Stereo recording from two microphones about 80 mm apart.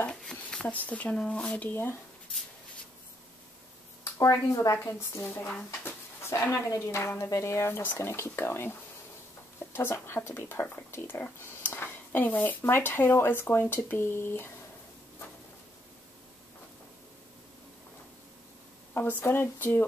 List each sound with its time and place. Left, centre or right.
0.2 s speech: centre; by 2.0 s left
4.0 s speech: left
5.9 s a sound: left
6.7 s speech: left
18.9 s speech: left